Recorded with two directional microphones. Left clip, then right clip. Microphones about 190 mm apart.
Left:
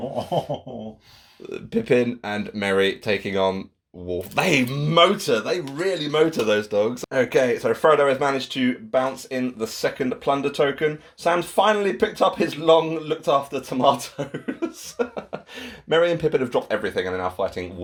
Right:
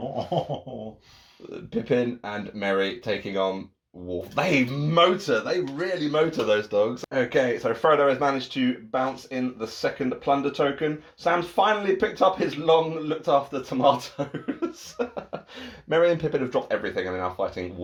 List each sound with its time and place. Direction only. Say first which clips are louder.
1.7 s speech: left 4 dB; 45° left (ahead or behind)